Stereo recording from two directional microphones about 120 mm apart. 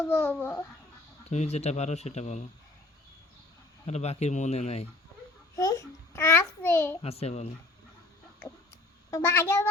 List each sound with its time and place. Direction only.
0.0 s a child's voice: 15° left (ahead or behind)
1.3 s speech: 65° left (ahead or behind)
3.8 s speech: 60° left (ahead or behind)
5.5 s a child's voice: 30° left (ahead or behind)
7.0 s speech: 55° left (ahead or behind)
9.0 s a child's voice: 25° left (ahead or behind)